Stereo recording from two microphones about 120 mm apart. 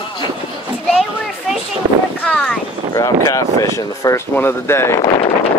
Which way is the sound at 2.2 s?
10° left (ahead or behind).